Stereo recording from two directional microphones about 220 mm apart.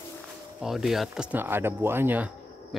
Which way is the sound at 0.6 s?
Centre (ahead or behind).